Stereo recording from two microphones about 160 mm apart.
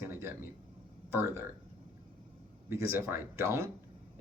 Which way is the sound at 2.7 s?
15° right (ahead or behind).